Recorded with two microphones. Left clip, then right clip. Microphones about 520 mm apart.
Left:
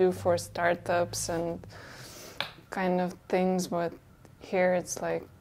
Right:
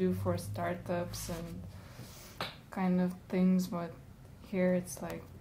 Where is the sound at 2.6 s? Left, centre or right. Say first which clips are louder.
Left 7 dB; left.